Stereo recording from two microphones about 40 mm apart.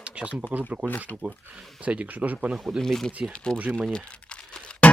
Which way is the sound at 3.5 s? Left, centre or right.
Right.